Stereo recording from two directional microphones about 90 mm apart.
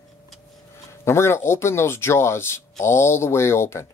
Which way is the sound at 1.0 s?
30° left (ahead or behind).